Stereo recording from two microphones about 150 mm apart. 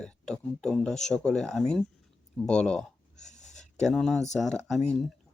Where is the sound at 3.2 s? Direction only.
50° left (ahead or behind).